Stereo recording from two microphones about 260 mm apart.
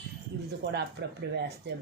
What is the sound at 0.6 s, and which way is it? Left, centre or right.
Speech, right.